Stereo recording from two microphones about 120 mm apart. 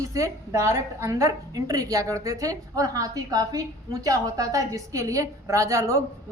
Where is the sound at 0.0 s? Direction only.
25° right (ahead or behind).